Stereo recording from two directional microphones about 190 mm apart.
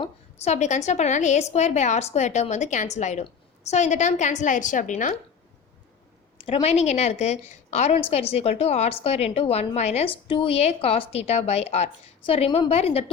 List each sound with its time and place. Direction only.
0.0 s a woman's voice: 35° left (ahead or behind)
6.4 s a woman's voice: 30° left (ahead or behind)